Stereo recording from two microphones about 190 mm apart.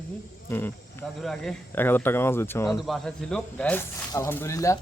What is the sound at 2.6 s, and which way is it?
Speech, centre (ahead or behind).